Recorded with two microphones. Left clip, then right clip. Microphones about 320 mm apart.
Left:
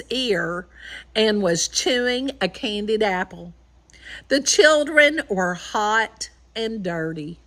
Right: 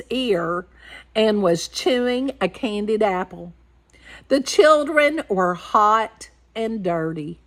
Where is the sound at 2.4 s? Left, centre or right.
Centre.